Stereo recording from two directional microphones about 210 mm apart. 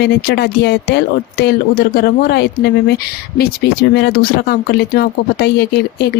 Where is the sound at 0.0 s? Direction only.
50° left (ahead or behind).